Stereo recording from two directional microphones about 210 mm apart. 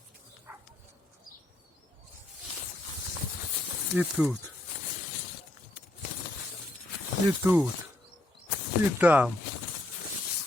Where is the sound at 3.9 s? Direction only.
5° right (ahead or behind).